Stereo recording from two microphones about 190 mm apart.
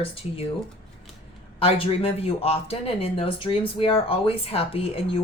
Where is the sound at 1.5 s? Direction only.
30° left (ahead or behind).